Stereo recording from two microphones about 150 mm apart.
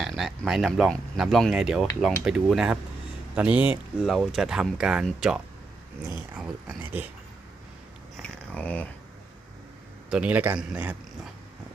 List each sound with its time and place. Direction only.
0.0 s speech: centre (ahead or behind)
6.0 s speech: 15° right (ahead or behind)
6.4 s speech: 5° right (ahead or behind)
8.1 s a sound: 10° left (ahead or behind)
10.1 s speech: 10° right (ahead or behind)